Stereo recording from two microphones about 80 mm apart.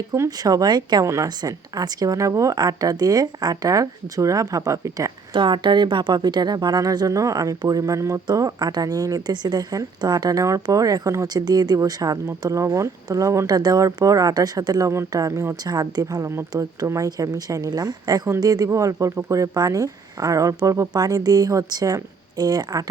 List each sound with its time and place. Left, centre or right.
0.3 s speech: right
1.0 s speech: right
1.4 s speech: right
5.3 s speech: right
11.4 s speech: right
13.5 s speech: right
15.6 s speech: right
16.5 s speech: right